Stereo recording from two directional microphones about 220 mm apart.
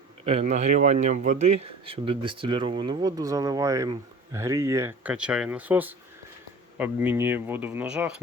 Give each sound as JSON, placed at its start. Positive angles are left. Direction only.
{"t": 0.3, "sound": "speech", "side_deg": -30}